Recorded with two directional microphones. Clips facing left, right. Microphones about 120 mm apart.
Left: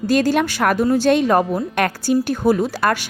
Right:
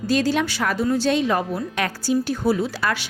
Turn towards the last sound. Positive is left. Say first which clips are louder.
# left 5 dB
turn(degrees=50)  # may be behind; listen again after turning